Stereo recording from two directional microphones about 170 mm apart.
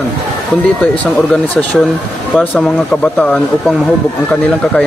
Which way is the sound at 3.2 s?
10° left (ahead or behind).